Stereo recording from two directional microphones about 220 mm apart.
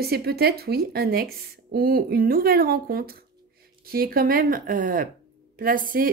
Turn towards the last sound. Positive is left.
turn(degrees=-40)  # may be behind; listen again after turning